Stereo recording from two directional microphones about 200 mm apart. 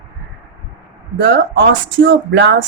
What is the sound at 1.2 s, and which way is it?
Speech, 60° right (ahead or behind).